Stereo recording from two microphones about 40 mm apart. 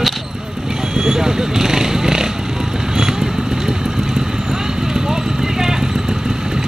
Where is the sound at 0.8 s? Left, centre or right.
Centre.